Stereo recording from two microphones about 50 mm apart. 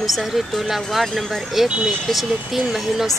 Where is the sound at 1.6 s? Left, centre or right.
Centre.